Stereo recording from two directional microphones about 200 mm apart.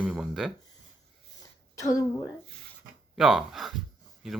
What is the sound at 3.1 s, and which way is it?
Speech, centre (ahead or behind).